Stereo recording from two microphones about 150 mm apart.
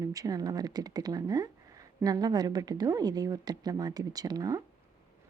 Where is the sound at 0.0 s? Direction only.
25° right (ahead or behind).